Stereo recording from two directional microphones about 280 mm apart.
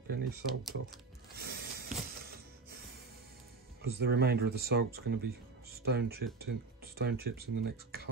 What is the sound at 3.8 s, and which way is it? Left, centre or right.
Speech, right.